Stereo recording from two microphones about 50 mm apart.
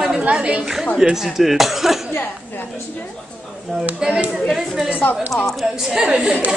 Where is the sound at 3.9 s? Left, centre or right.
Centre.